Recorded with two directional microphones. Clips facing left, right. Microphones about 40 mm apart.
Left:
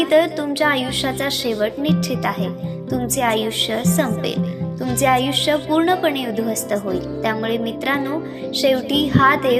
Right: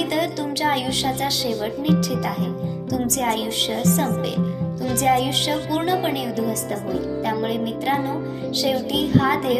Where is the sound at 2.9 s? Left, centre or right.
Left.